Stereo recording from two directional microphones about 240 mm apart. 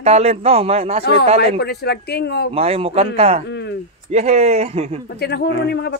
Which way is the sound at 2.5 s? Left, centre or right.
Right.